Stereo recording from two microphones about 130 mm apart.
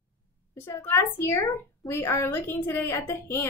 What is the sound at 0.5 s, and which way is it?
A woman's voice, 20° left (ahead or behind).